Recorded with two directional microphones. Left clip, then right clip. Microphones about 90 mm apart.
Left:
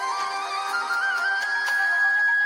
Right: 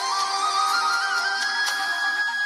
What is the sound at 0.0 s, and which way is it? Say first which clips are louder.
Music: right 3 dB; 10° right (ahead or behind).